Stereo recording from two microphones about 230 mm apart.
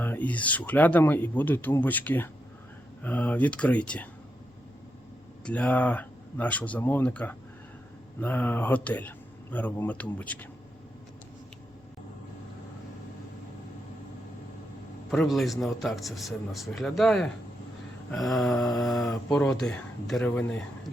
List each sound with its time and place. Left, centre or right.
0.0 s speech: centre
5.5 s speech: centre
15.1 s speech: centre